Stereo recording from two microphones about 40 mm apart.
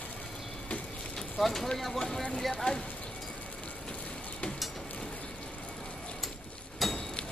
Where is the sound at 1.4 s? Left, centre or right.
Centre; by 2.8 s left.